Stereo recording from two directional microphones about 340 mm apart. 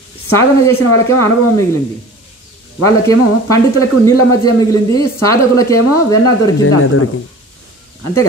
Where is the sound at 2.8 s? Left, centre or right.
Centre.